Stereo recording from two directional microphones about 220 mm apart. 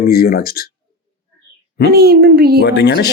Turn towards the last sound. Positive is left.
turn(degrees=50)  # may be behind; listen again after turning